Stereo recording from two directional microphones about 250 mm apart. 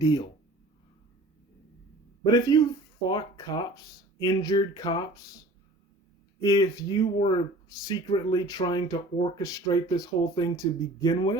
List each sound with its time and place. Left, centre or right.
0.0 s speech: centre
2.3 s speech: centre
6.4 s speech: centre